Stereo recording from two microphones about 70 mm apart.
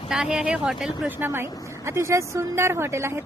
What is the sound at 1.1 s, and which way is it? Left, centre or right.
A woman's voice, right.